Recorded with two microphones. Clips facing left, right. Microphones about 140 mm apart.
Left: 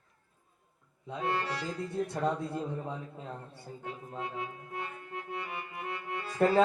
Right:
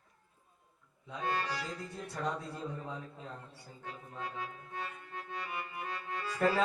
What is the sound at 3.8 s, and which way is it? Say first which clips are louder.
Speech: left 3 dB; 25° left (ahead or behind).